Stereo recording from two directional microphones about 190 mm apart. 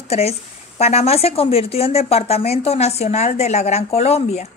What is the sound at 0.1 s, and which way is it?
Speech, 30° left (ahead or behind).